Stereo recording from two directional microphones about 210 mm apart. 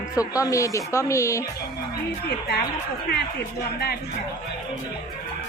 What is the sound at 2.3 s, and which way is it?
Speech, 50° left (ahead or behind).